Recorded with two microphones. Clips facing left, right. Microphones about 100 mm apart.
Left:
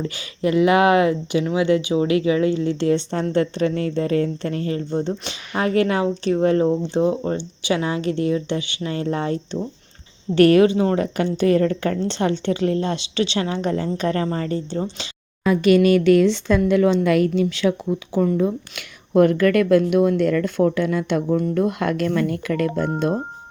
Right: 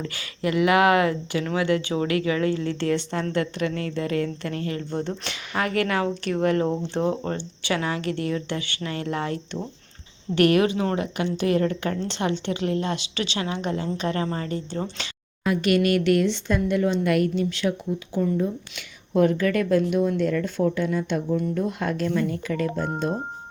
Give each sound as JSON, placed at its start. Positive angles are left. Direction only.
{"t": 0.0, "sound": "a woman's voice", "side_deg": 25}
{"t": 16.2, "sound": "speech", "side_deg": 90}
{"t": 19.1, "sound": "speech", "side_deg": 60}
{"t": 21.2, "sound": "speech", "side_deg": 55}
{"t": 21.6, "sound": "speech", "side_deg": 80}